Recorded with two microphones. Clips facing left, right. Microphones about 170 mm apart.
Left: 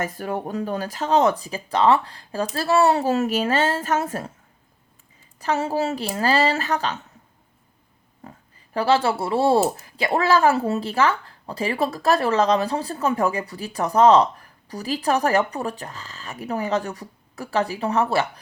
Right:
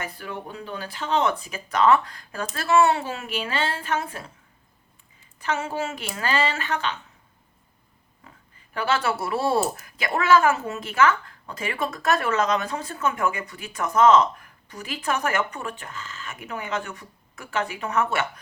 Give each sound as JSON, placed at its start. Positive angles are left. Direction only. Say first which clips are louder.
{"t": 0.0, "sound": "speech", "louder": "left 7 dB", "side_deg": 45}
{"t": 5.4, "sound": "speech", "louder": "left 5 dB", "side_deg": 35}
{"t": 8.7, "sound": "speech", "louder": "left 5 dB", "side_deg": 35}